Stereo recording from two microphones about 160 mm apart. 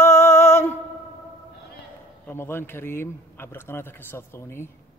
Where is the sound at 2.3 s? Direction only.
15° left (ahead or behind).